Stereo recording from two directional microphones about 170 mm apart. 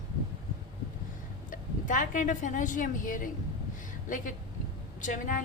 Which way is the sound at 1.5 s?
50° left (ahead or behind).